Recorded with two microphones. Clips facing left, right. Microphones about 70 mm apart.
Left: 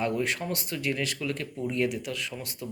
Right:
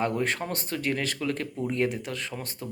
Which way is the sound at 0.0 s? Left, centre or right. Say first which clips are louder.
Right 1 dB; right.